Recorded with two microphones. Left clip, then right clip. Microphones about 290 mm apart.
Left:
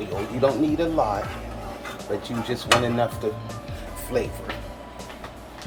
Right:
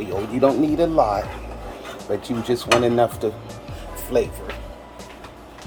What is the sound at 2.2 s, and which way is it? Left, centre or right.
Dishes, right.